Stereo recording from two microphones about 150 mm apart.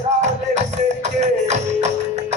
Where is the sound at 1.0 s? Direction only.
50° right (ahead or behind).